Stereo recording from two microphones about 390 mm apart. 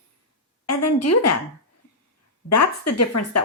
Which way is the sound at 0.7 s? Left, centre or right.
Left.